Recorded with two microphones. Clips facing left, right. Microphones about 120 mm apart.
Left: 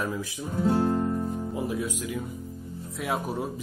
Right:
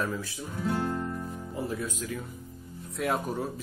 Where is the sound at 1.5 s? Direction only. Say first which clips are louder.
Left 3 dB; 15° left (ahead or behind).